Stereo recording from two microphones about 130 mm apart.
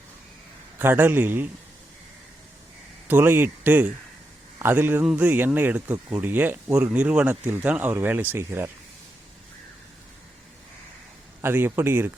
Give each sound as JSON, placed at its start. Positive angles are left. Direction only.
{"t": 0.8, "sound": "speech", "side_deg": -15}
{"t": 3.1, "sound": "speech", "side_deg": -15}
{"t": 11.4, "sound": "speech", "side_deg": -15}